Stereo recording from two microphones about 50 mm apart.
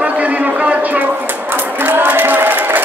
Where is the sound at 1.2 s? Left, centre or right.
Right.